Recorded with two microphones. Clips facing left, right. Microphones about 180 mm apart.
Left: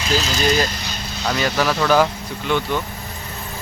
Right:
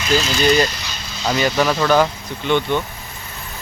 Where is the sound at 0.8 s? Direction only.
50° left (ahead or behind).